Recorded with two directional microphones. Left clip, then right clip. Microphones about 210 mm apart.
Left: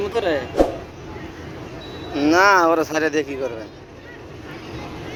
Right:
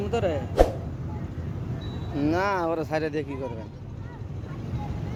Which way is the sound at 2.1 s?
5° left (ahead or behind).